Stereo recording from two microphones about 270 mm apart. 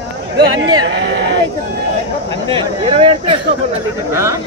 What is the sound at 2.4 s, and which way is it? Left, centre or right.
Speech, centre.